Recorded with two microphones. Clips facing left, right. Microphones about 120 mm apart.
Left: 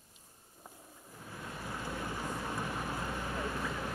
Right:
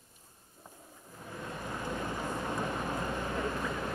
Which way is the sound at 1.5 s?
20° right (ahead or behind).